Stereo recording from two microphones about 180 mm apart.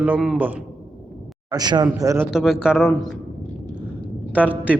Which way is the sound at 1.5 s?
20° right (ahead or behind).